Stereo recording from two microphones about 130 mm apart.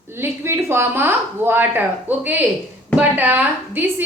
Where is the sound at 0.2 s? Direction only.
20° right (ahead or behind).